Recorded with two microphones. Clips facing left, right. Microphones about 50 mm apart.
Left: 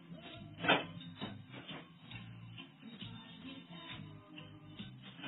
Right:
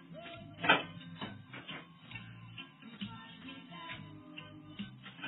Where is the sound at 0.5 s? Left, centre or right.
Right.